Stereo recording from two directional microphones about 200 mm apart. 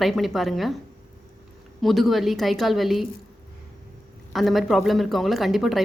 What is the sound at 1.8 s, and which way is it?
Speech, centre (ahead or behind).